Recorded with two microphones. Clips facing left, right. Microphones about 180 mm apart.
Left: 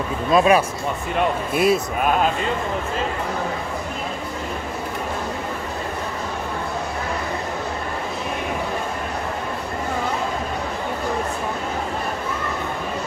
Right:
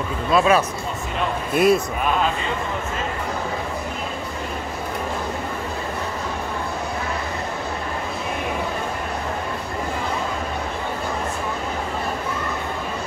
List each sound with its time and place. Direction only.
0.3 s speech: 15° left (ahead or behind)
1.5 s a man's voice: centre (ahead or behind)